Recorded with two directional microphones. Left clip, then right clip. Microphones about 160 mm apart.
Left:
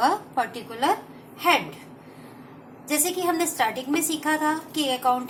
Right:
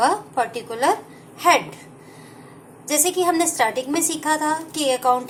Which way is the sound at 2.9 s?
30° right (ahead or behind).